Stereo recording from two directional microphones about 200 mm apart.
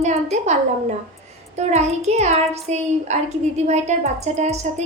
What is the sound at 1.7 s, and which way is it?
A child's voice, 35° right (ahead or behind).